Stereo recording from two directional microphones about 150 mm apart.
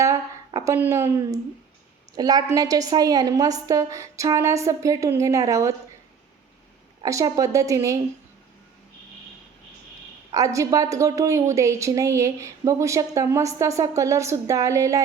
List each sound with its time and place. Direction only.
0.0 s a woman's voice: 20° right (ahead or behind)
7.0 s a woman's voice: 20° right (ahead or behind)
10.3 s a woman's voice: 20° right (ahead or behind)